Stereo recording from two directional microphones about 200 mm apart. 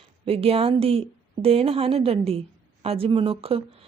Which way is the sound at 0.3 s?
30° right (ahead or behind).